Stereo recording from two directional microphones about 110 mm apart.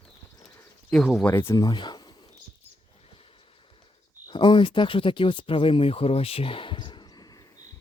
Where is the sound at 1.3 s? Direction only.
20° left (ahead or behind).